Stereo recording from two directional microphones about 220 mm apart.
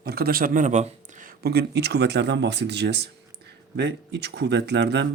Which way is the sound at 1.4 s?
45° right (ahead or behind).